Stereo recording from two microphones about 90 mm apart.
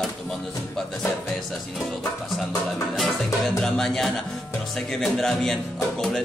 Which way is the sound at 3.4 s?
5° left (ahead or behind).